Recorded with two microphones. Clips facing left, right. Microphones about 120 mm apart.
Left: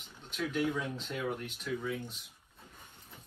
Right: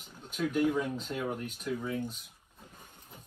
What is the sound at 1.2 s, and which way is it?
Speech, 40° right (ahead or behind).